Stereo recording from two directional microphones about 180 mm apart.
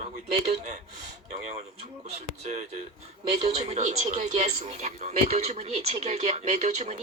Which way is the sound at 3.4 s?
35° right (ahead or behind).